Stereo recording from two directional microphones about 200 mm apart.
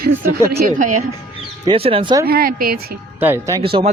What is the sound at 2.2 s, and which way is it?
Speech, 50° right (ahead or behind).